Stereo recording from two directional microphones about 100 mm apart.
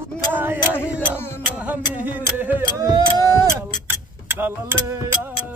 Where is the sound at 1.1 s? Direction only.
25° left (ahead or behind).